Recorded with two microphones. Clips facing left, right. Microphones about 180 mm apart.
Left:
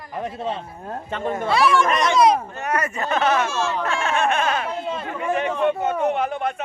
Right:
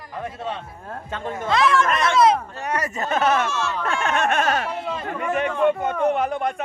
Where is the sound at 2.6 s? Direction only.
35° right (ahead or behind).